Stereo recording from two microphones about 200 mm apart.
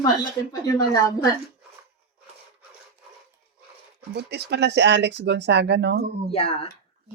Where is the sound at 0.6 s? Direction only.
20° left (ahead or behind).